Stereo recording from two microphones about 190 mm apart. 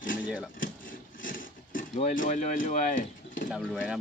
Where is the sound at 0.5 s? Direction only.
45° left (ahead or behind).